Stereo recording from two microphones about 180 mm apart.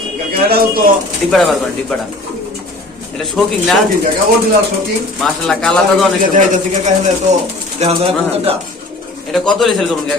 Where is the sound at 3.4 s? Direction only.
Centre (ahead or behind).